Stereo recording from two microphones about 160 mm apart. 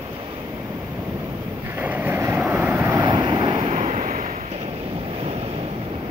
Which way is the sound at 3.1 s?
30° right (ahead or behind).